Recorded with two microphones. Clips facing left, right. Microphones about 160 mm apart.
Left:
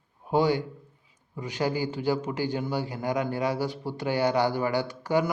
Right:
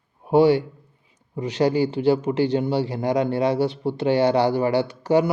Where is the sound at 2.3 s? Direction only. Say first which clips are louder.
Right 8 dB; 20° right (ahead or behind).